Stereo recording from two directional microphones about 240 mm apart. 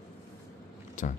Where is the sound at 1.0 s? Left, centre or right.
Left.